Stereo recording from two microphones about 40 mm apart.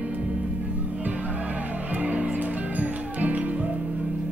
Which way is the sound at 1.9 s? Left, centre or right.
Right.